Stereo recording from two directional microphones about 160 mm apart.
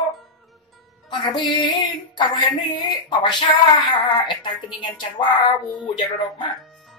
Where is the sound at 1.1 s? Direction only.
30° left (ahead or behind).